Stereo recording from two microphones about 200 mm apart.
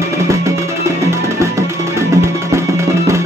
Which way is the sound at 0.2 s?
15° right (ahead or behind).